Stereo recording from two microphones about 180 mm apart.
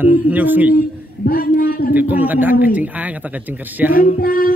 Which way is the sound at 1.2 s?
55° left (ahead or behind).